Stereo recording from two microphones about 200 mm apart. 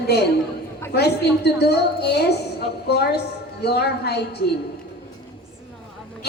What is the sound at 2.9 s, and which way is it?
A woman's voice, 55° left (ahead or behind).